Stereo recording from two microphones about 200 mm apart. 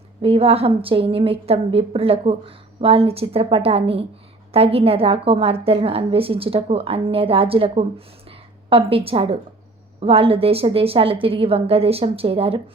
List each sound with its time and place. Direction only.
0.2 s a woman's voice: 30° right (ahead or behind)